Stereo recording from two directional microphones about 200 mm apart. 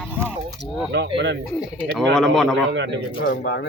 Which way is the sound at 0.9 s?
60° right (ahead or behind).